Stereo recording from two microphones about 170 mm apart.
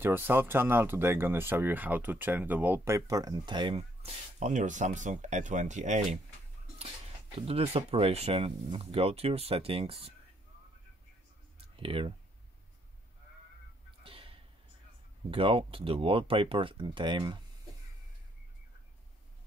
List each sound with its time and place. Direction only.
0.0 s speech: 15° right (ahead or behind); by 6.1 s 45° right (ahead or behind)
7.3 s speech: 35° right (ahead or behind)
11.7 s speech: 30° right (ahead or behind)
14.0 s a sound: 35° right (ahead or behind)
15.3 s speech: 30° right (ahead or behind)